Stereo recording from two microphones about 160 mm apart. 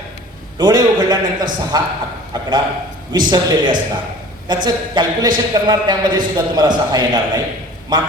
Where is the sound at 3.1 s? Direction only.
25° right (ahead or behind).